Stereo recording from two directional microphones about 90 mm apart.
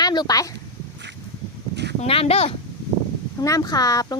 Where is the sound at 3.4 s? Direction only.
45° left (ahead or behind).